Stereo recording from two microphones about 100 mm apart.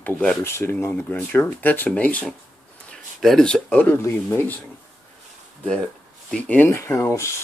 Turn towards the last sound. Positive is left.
turn(degrees=30)  # may be behind; listen again after turning